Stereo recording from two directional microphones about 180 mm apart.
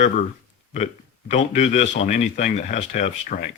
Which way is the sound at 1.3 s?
40° left (ahead or behind).